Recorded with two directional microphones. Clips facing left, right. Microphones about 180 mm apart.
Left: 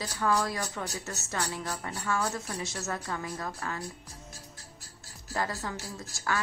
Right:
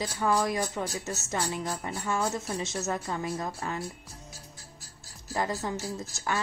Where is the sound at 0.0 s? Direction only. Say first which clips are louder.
Right 2 dB; 20° right (ahead or behind).